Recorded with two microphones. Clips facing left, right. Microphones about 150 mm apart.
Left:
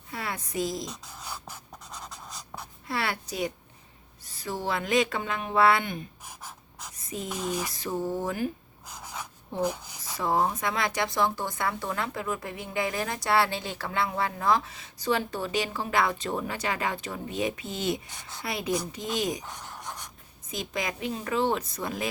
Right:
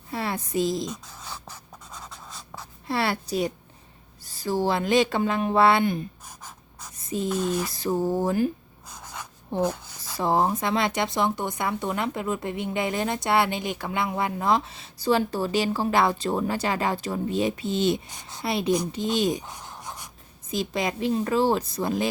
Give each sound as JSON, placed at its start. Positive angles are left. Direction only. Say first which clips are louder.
{"t": 0.1, "sound": "a woman's voice", "louder": "right 6 dB", "side_deg": -30}
{"t": 1.0, "sound": "a sound", "louder": "even", "side_deg": 10}
{"t": 2.0, "sound": "writing", "louder": "right 1 dB", "side_deg": 10}
{"t": 2.8, "sound": "a woman's voice", "louder": "right 5 dB", "side_deg": -30}
{"t": 6.2, "sound": "gasp", "louder": "even", "side_deg": 10}
{"t": 7.3, "sound": "speech", "louder": "right 5 dB", "side_deg": 10}
{"t": 7.7, "sound": "a woman's voice", "louder": "right 6 dB", "side_deg": -35}
{"t": 8.9, "sound": "gasp", "louder": "even", "side_deg": 10}
{"t": 9.6, "sound": "a sound", "louder": "right 2 dB", "side_deg": 15}
{"t": 10.2, "sound": "speech", "louder": "right 3 dB", "side_deg": -30}
{"t": 19.5, "sound": "pant", "louder": "right 1 dB", "side_deg": -10}
{"t": 20.5, "sound": "a woman's voice", "louder": "right 6 dB", "side_deg": -30}